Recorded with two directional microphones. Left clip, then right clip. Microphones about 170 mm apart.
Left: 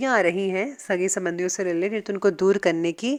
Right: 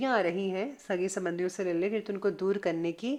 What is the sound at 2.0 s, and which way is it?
A woman's voice, 40° left (ahead or behind).